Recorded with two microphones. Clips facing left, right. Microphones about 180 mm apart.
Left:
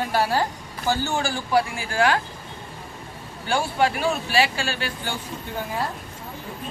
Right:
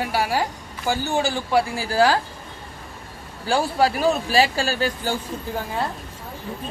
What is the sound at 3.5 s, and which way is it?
Speech, 35° right (ahead or behind).